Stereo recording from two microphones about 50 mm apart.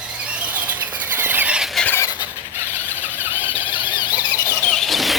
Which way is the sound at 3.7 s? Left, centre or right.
Right.